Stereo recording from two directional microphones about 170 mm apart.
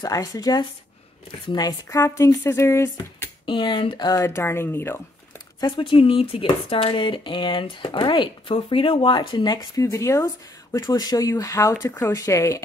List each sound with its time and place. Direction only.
0.0 s speech: 20° left (ahead or behind)
3.4 s speech: 30° left (ahead or behind)
5.6 s speech: 30° left (ahead or behind)